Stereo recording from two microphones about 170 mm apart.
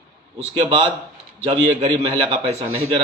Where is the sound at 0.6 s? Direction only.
30° right (ahead or behind).